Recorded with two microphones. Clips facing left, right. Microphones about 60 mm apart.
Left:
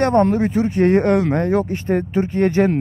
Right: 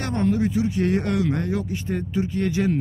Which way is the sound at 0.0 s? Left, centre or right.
Left.